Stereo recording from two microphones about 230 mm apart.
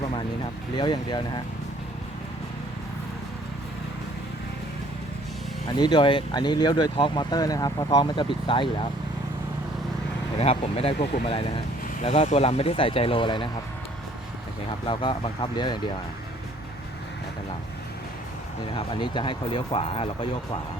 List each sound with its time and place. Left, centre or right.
0.8 s speech: centre
5.7 s speech: centre
10.3 s speech: left
14.8 s speech: left
18.9 s speech: left